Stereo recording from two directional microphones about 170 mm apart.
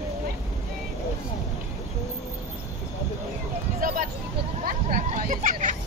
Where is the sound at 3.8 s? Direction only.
55° right (ahead or behind).